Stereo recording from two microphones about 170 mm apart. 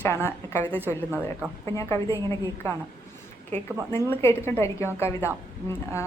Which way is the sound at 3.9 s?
15° left (ahead or behind).